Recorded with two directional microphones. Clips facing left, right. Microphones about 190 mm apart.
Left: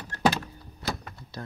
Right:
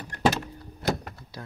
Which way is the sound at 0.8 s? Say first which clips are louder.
Right 6 dB; 50° right (ahead or behind).